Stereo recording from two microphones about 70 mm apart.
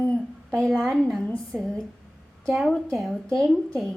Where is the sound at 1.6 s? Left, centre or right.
Centre.